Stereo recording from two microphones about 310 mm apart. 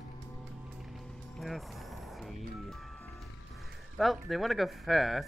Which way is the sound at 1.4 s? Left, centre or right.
Centre.